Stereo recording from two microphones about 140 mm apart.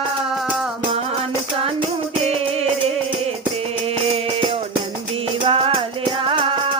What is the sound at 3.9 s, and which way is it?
Music, 45° right (ahead or behind).